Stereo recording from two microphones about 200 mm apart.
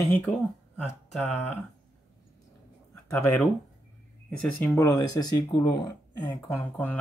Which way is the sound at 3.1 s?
10° left (ahead or behind).